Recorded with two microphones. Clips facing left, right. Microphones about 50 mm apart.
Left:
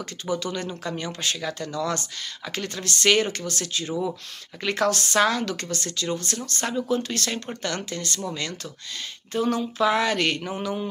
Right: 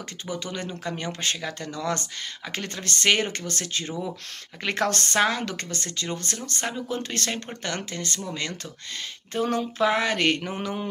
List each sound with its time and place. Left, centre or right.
0.3 s speech: right
5.2 s speech: right
9.3 s speech: right
9.8 s speech: right